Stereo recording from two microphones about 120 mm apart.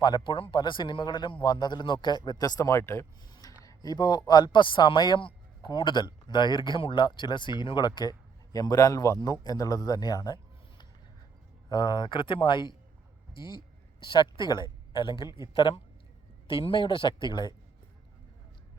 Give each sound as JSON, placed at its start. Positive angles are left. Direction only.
{"t": 0.0, "sound": "a man's voice", "side_deg": 40}